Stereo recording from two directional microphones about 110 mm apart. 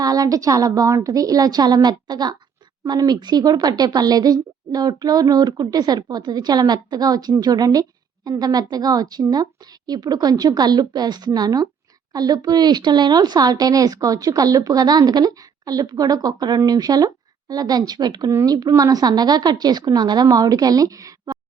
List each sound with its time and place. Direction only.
0.0 s a woman's voice: 35° right (ahead or behind)